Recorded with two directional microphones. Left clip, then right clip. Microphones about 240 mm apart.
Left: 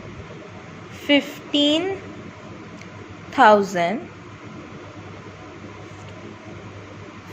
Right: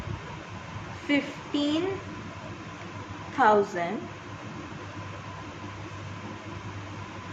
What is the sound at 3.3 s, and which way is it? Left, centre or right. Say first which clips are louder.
Speech: left 8 dB; left.